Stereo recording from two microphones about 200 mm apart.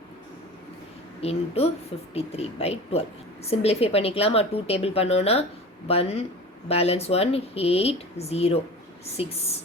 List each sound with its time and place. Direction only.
1.2 s a woman's voice: 30° left (ahead or behind)